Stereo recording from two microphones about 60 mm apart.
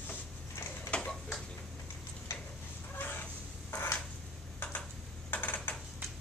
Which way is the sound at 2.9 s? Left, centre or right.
Left.